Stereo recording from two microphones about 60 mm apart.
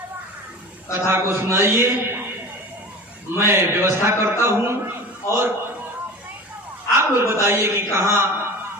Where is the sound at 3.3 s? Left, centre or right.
Right.